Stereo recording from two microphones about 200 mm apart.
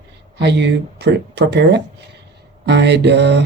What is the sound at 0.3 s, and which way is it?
Speech, 60° right (ahead or behind).